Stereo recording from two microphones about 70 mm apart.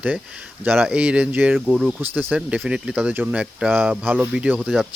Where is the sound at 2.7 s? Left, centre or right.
Centre.